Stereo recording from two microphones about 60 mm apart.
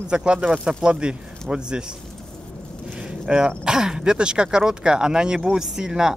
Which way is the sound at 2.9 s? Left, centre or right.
Centre.